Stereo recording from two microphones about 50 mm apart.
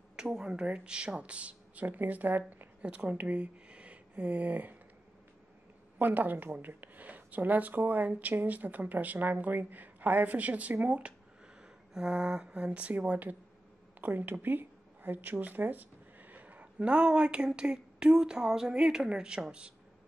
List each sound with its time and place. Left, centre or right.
0.1 s speech: centre; by 2.7 s right
2.8 s speech: right
4.1 s speech: right
5.9 s speech: right; by 12.6 s centre
12.6 s speech: right
14.4 s a sound: right
15.3 s speech: right; by 19.4 s centre